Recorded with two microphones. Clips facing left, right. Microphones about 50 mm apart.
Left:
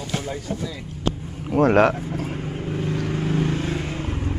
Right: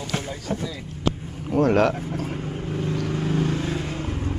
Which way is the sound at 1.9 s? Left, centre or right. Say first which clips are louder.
Left 1 dB; centre.